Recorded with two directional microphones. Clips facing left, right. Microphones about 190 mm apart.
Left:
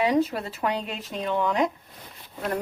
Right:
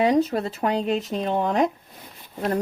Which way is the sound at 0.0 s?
45° right (ahead or behind).